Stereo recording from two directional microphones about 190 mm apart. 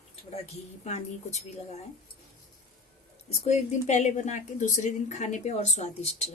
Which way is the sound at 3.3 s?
35° left (ahead or behind).